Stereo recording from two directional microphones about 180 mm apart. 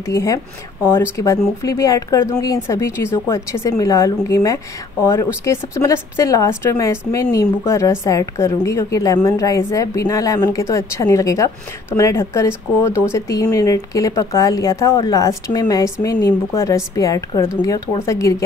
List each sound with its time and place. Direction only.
0.0 s a woman's voice: 15° left (ahead or behind)